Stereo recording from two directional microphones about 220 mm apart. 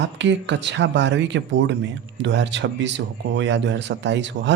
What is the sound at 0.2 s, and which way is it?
Speech, 55° right (ahead or behind).